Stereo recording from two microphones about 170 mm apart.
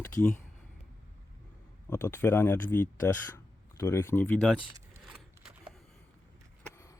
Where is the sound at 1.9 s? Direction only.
15° left (ahead or behind).